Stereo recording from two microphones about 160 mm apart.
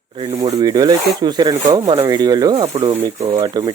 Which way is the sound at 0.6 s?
25° right (ahead or behind).